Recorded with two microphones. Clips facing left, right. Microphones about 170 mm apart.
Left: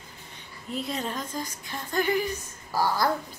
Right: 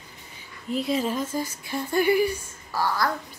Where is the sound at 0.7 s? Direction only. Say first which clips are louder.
Right 6 dB; centre (ahead or behind).